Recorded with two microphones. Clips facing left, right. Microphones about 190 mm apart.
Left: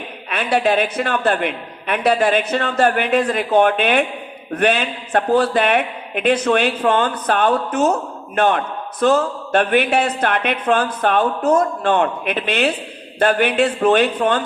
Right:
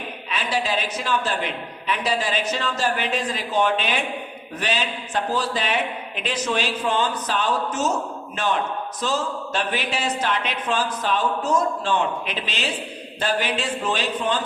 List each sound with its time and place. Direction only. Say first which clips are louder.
0.3 s a man's voice: left 8 dB; 60° left (ahead or behind)